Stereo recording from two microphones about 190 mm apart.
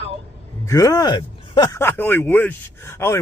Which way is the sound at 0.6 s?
20° left (ahead or behind).